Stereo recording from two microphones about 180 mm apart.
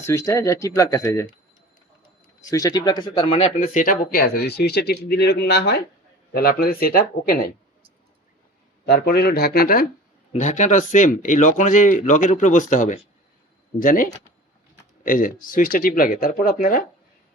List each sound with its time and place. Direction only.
0.0 s speech: 15° left (ahead or behind)
2.5 s speech: 20° left (ahead or behind)
3.3 s speech: 45° left (ahead or behind)
8.9 s speech: 60° left (ahead or behind)
10.3 s speech: 40° left (ahead or behind)